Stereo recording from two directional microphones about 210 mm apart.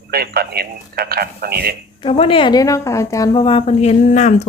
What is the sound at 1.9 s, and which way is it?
A woman's voice, 25° left (ahead or behind).